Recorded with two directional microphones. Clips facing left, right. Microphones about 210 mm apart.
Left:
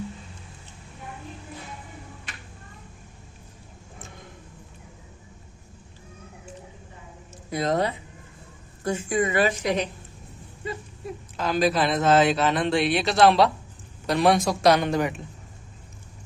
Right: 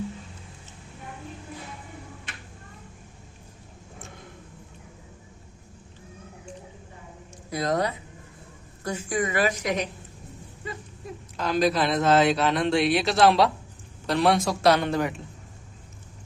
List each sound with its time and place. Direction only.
7.5 s a woman's voice: 25° left (ahead or behind)
11.3 s speech: centre (ahead or behind)
14.1 s a man's voice: 15° left (ahead or behind)